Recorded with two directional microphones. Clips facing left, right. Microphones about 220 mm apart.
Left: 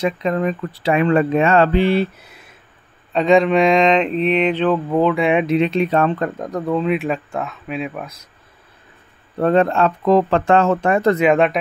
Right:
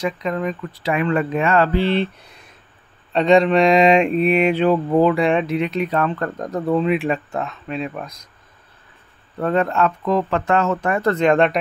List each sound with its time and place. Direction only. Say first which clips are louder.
0.0 s speech: left 3 dB; 30° left (ahead or behind)
1.9 s speech: left 2 dB; 5° left (ahead or behind)
3.1 s mantra: even; centre (ahead or behind)
5.4 s speech: left 4 dB; 20° left (ahead or behind)
6.3 s speech: right 1 dB; centre (ahead or behind)
9.4 s speech: left 4 dB; 30° left (ahead or behind)
11.1 s speech: left 1 dB; 5° left (ahead or behind)